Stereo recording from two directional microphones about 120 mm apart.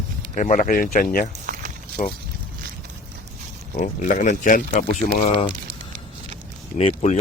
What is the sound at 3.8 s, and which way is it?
Speech, 90° left.